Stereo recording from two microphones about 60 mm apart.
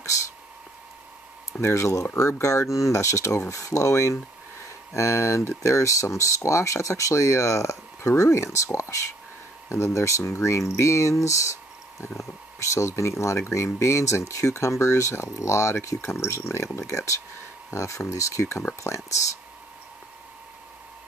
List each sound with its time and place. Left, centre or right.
1.6 s speech: left